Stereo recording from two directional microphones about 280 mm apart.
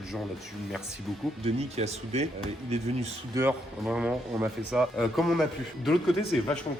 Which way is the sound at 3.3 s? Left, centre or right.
Centre.